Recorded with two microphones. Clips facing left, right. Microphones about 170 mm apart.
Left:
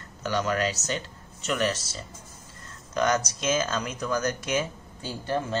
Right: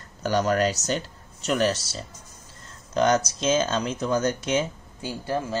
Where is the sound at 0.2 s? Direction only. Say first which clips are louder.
Right 4 dB; 40° right (ahead or behind).